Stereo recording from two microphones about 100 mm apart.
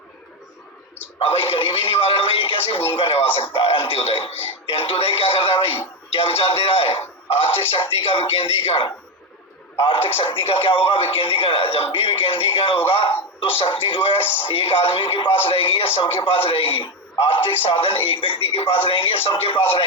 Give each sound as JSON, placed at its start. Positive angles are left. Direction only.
{"t": 1.2, "sound": "speech", "side_deg": 65}
{"t": 3.5, "sound": "speech", "side_deg": 70}
{"t": 10.2, "sound": "speech", "side_deg": 65}
{"t": 14.2, "sound": "speech", "side_deg": 20}
{"t": 14.4, "sound": "speech", "side_deg": 70}